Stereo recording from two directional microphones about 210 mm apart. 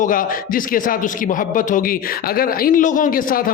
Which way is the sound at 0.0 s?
40° left (ahead or behind).